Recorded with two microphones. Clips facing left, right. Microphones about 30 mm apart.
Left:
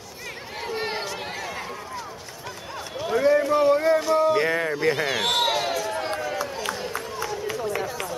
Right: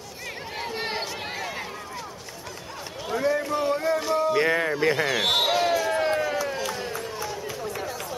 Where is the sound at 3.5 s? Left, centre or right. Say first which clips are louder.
Left 5 dB; centre.